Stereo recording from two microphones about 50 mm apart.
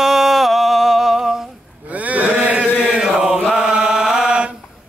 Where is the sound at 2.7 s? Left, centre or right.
Centre.